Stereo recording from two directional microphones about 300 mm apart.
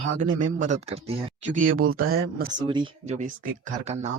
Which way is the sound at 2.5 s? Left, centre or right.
Centre.